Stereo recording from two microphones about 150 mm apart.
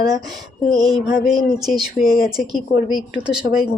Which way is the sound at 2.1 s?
25° right (ahead or behind).